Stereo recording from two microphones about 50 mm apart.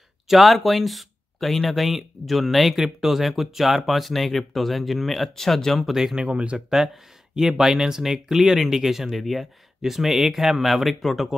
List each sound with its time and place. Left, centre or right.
0.3 s speech: centre
6.2 s speech: right
7.3 s speech: centre